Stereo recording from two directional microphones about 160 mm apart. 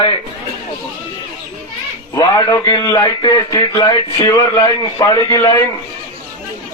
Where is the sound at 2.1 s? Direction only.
25° left (ahead or behind).